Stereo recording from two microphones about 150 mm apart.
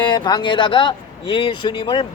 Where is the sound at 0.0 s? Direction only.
30° left (ahead or behind).